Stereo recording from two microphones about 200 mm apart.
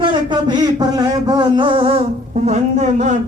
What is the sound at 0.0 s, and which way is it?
Speech, 25° right (ahead or behind).